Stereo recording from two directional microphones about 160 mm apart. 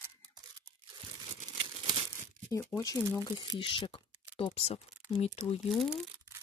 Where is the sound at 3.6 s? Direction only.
30° left (ahead or behind).